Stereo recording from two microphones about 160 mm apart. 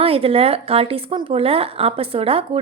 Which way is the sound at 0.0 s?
35° right (ahead or behind).